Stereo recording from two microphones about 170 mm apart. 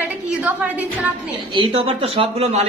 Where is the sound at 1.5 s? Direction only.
30° right (ahead or behind).